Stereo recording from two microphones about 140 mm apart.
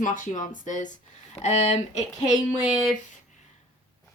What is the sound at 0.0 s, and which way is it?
Speech, 65° left (ahead or behind).